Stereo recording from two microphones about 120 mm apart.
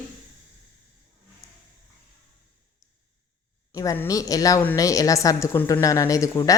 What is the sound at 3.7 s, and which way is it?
A woman's voice, 30° left (ahead or behind).